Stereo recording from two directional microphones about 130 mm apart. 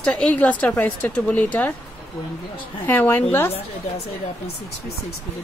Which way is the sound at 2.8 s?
15° left (ahead or behind).